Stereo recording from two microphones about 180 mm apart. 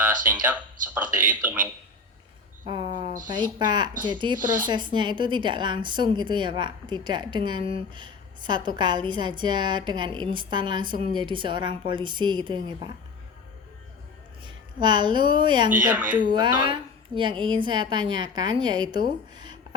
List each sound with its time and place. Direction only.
0.9 s speech: 10° right (ahead or behind)
2.6 s a sound: 25° right (ahead or behind)
3.4 s a woman's voice: 25° right (ahead or behind)
14.4 s a woman's voice: 25° right (ahead or behind)
15.8 s speech: 10° right (ahead or behind)
16.1 s a woman's voice: 25° right (ahead or behind)